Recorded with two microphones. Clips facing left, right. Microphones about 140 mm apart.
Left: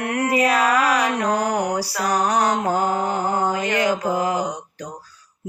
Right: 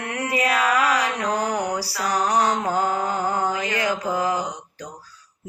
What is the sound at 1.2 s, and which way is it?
Mantra, 40° left (ahead or behind).